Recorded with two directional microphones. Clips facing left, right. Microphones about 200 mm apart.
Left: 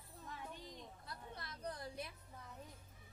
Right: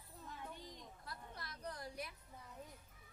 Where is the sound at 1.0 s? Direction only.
25° left (ahead or behind).